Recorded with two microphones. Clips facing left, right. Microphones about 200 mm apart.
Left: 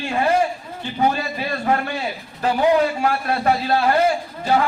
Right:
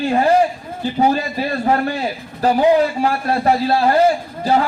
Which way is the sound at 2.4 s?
35° right (ahead or behind).